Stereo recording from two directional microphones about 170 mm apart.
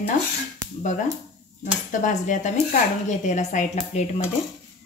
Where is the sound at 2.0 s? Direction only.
45° left (ahead or behind).